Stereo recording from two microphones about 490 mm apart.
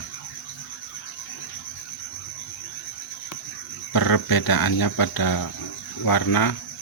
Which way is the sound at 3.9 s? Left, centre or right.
Left.